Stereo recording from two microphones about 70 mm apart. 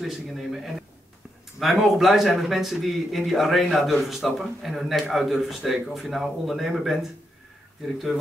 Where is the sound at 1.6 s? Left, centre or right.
Centre.